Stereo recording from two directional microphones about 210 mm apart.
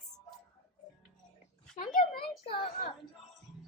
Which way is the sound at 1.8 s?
40° left (ahead or behind).